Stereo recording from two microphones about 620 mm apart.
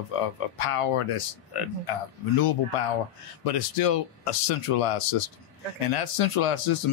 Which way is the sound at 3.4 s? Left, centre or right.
Left.